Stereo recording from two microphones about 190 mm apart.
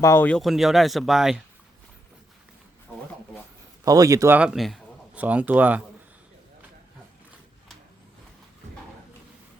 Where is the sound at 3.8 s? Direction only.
15° right (ahead or behind).